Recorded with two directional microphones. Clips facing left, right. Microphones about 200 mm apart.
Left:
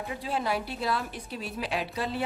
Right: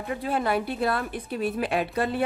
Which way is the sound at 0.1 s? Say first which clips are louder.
Right 5 dB; 55° right (ahead or behind).